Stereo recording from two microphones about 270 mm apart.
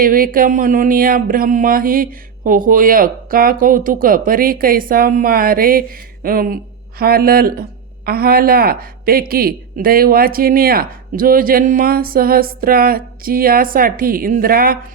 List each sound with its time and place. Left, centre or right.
0.0 s speech: right